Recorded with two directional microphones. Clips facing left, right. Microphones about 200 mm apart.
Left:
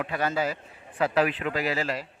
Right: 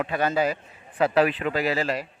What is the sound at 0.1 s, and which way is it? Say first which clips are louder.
A man's voice: right 4 dB; 20° right (ahead or behind).